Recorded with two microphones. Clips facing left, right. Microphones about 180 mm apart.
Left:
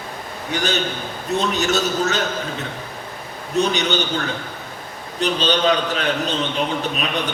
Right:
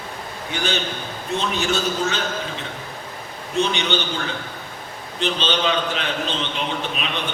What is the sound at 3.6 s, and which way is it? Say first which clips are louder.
Speech: left 2 dB; 40° left (ahead or behind).